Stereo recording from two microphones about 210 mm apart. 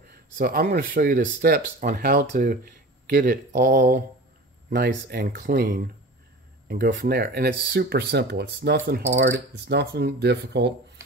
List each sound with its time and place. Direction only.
0.4 s speech: 45° right (ahead or behind)